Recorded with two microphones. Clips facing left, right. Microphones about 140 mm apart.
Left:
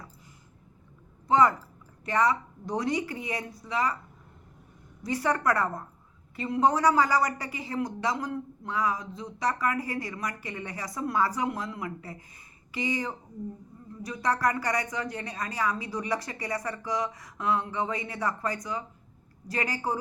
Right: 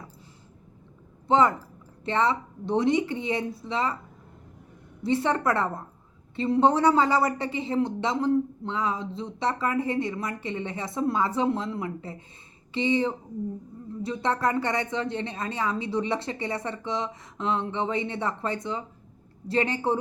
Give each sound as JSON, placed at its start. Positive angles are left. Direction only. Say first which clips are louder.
{"t": 1.3, "sound": "a woman's voice", "louder": "right 1 dB", "side_deg": -25}
{"t": 5.0, "sound": "a woman's voice", "louder": "right 3 dB", "side_deg": -25}